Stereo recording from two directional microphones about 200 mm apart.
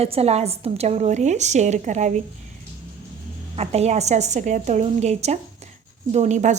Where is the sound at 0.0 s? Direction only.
30° right (ahead or behind).